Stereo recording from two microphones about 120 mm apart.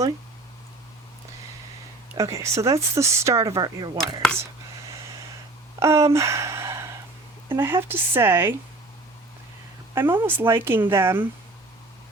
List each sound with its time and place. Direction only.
2.1 s speech: 25° right (ahead or behind)
5.8 s speech: 25° right (ahead or behind)
6.1 s gasp: 25° right (ahead or behind)
7.4 s speech: 20° right (ahead or behind)
9.9 s speech: 15° right (ahead or behind)